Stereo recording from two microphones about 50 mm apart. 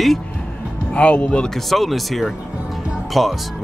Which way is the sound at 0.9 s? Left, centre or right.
Left.